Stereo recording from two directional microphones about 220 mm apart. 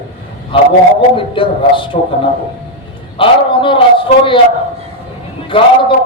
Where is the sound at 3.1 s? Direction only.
25° left (ahead or behind).